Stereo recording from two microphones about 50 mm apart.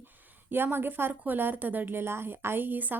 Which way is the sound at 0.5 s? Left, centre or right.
Right.